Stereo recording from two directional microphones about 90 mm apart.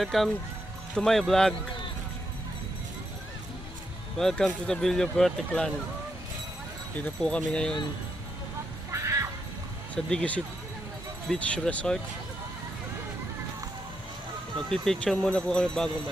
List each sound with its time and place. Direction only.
0.0 s speech: centre (ahead or behind)
4.2 s speech: 5° left (ahead or behind)
7.2 s speech: 10° left (ahead or behind)
8.9 s music: 35° right (ahead or behind)
9.9 s speech: 15° left (ahead or behind)
14.5 s speech: 5° left (ahead or behind)